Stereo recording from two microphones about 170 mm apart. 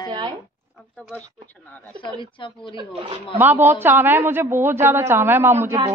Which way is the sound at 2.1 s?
30° left (ahead or behind).